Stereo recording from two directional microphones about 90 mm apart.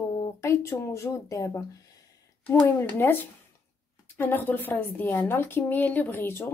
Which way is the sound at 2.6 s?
30° left (ahead or behind).